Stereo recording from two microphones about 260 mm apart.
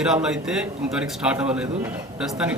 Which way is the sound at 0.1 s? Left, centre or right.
Centre.